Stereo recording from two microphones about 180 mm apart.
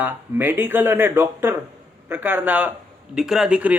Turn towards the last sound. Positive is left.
turn(degrees=-5)  # may be behind; listen again after turning